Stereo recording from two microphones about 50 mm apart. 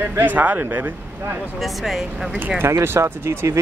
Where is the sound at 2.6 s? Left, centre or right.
Right.